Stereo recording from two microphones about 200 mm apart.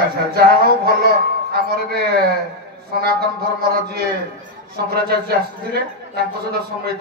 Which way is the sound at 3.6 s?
50° right (ahead or behind).